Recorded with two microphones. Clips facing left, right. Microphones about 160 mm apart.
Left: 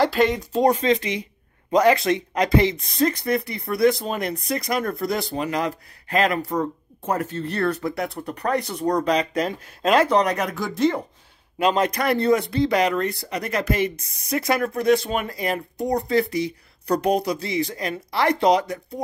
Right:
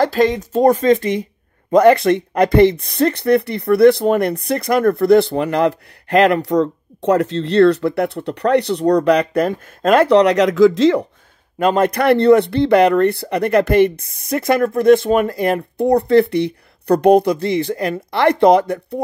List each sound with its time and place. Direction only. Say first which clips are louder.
0.0 s speech: right 4 dB; 40° right (ahead or behind); by 11.1 s 90° right
11.5 s speech: right 5 dB; 50° right (ahead or behind)